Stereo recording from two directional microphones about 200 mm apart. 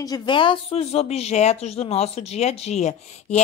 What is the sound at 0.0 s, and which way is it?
Speech, 20° left (ahead or behind).